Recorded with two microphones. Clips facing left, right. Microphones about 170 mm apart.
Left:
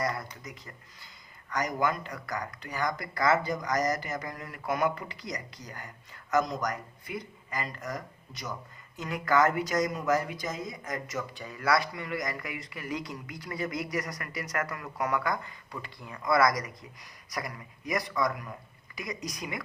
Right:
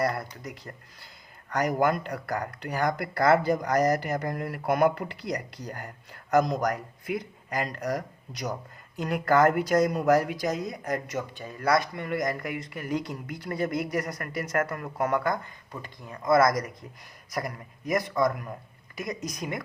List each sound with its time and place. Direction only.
0.2 s speech: 65° right (ahead or behind)
7.1 s speech: 65° right (ahead or behind)
11.3 s speech: 45° right (ahead or behind)
15.8 s speech: 35° right (ahead or behind)
16.3 s speech: 50° right (ahead or behind)